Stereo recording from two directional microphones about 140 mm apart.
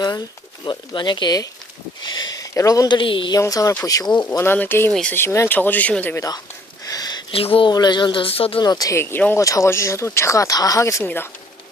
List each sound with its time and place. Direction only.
0.6 s speech: 35° left (ahead or behind)
3.4 s speech: 25° left (ahead or behind)
6.8 s a sound: 25° left (ahead or behind)
7.3 s speech: 40° left (ahead or behind)
8.6 s speech: 25° left (ahead or behind)